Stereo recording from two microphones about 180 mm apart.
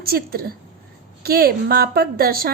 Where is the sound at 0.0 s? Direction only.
55° right (ahead or behind).